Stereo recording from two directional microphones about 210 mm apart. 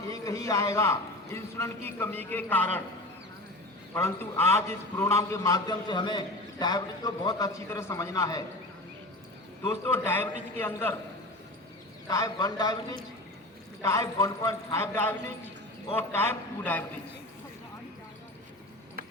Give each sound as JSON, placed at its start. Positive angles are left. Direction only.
{"t": 0.1, "sound": "a man's voice", "side_deg": 15}
{"t": 3.9, "sound": "a man's voice", "side_deg": 10}
{"t": 9.6, "sound": "a man's voice", "side_deg": 10}
{"t": 12.0, "sound": "a man's voice", "side_deg": 15}